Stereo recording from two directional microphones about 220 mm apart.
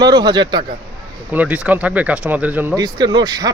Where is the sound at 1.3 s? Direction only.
5° right (ahead or behind).